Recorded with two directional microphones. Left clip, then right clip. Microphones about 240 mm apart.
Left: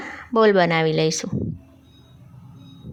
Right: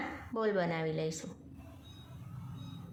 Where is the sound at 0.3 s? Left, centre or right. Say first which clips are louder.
Left 17 dB; left.